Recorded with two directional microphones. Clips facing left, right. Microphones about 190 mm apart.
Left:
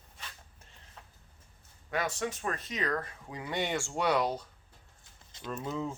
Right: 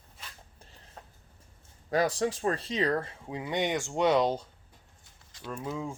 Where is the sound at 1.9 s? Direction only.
35° right (ahead or behind).